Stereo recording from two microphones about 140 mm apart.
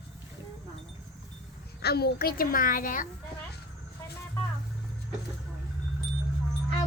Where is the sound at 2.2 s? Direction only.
90° left; by 3.0 s 75° left (ahead or behind).